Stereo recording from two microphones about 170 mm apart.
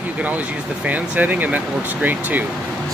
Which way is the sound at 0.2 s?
10° right (ahead or behind).